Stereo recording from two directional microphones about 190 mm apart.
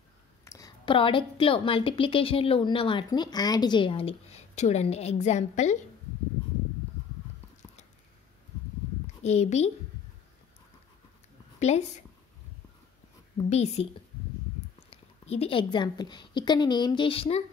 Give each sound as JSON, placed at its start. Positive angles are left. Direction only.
{"t": 0.5, "sound": "a woman's voice", "side_deg": 20}
{"t": 9.0, "sound": "a woman's voice", "side_deg": 35}
{"t": 11.6, "sound": "a woman's voice", "side_deg": 35}
{"t": 13.5, "sound": "a woman's voice", "side_deg": 35}
{"t": 14.9, "sound": "a woman's voice", "side_deg": 35}